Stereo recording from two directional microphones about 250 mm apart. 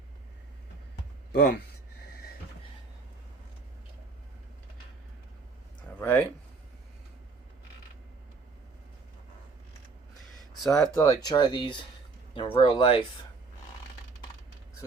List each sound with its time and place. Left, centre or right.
1.3 s speech: left
6.0 s speech: centre
10.7 s speech: centre